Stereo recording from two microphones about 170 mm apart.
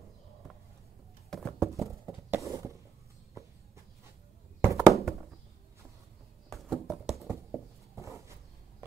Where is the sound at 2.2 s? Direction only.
15° right (ahead or behind).